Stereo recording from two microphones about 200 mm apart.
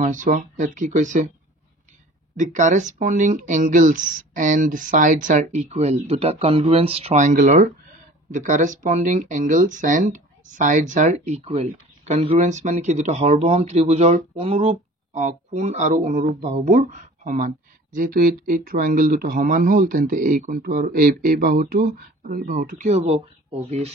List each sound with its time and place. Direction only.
0.0 s speech: 40° right (ahead or behind)
2.3 s speech: 35° right (ahead or behind)